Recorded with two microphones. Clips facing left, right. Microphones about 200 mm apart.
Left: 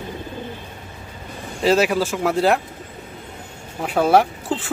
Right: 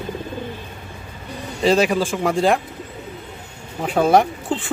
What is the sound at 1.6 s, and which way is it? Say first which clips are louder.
Speech: even; 5° left (ahead or behind).